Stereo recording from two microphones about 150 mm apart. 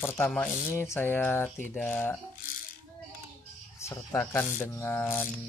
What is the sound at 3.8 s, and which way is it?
Speech, 20° left (ahead or behind).